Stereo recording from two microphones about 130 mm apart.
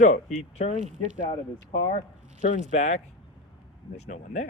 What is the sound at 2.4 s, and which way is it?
Speech, 65° left (ahead or behind).